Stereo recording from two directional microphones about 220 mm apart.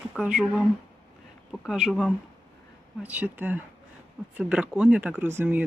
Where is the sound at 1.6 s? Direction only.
Centre (ahead or behind).